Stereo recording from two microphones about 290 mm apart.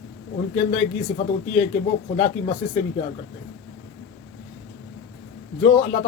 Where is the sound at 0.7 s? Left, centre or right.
Centre.